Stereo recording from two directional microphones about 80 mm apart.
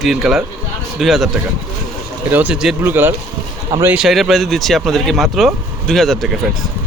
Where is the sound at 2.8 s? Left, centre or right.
Right.